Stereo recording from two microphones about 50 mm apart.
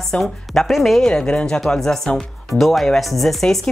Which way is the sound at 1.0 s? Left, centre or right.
Centre.